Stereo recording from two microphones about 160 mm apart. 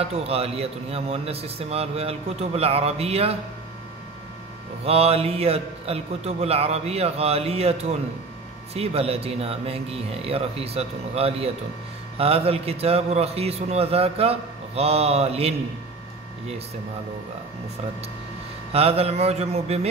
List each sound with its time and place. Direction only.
0.0 s a man's voice: 40° right (ahead or behind)
4.8 s a man's voice: 40° right (ahead or behind)
18.7 s a man's voice: 40° right (ahead or behind)